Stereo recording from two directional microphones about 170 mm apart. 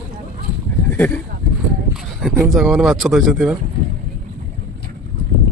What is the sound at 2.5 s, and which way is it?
Speech, centre (ahead or behind).